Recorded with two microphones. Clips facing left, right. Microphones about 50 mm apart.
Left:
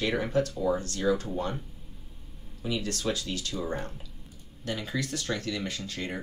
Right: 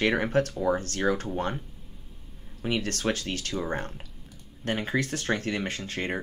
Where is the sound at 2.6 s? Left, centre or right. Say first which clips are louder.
Right 3 dB; right.